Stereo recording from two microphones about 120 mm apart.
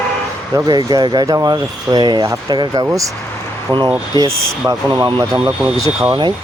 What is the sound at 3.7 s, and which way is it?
Speech, 40° right (ahead or behind).